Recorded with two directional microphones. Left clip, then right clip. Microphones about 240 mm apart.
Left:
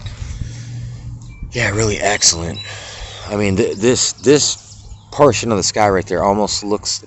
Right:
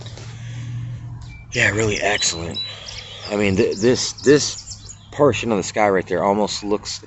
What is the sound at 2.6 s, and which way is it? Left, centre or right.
Cricket, left.